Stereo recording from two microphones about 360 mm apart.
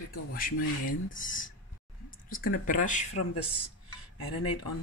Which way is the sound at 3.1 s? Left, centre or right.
Left.